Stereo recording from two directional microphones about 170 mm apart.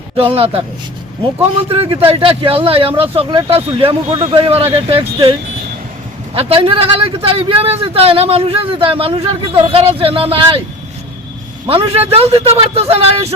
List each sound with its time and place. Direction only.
0.2 s speech: 35° right (ahead or behind)
6.3 s speech: 35° right (ahead or behind)
11.7 s speech: 35° right (ahead or behind)